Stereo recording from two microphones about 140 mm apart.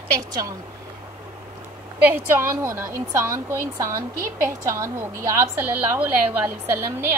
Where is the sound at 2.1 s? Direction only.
15° right (ahead or behind).